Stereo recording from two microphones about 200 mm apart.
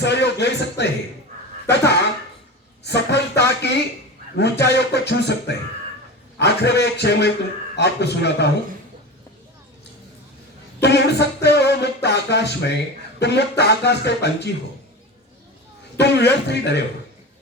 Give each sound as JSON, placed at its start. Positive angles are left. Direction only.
{"t": 0.0, "sound": "music", "side_deg": 60}
{"t": 2.8, "sound": "a sound", "side_deg": 60}
{"t": 4.4, "sound": "music", "side_deg": 60}
{"t": 10.8, "sound": "music", "side_deg": 60}
{"t": 16.0, "sound": "music", "side_deg": 60}